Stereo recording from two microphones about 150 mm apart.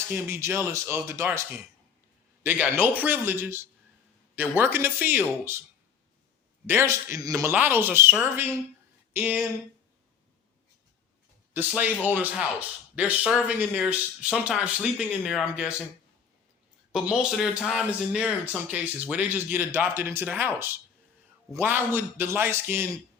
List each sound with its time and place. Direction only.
0.1 s speech: 15° right (ahead or behind)
6.7 s a man's voice: 15° right (ahead or behind)
7.5 s speech: 15° right (ahead or behind)
11.5 s speech: 10° right (ahead or behind)
16.9 s speech: 5° right (ahead or behind)